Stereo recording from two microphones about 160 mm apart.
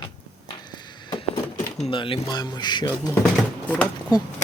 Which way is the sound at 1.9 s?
30° left (ahead or behind).